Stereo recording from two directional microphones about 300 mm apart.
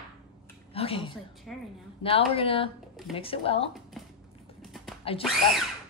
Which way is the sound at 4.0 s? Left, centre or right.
Centre.